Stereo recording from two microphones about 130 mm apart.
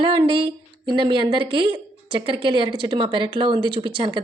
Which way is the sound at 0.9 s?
40° right (ahead or behind).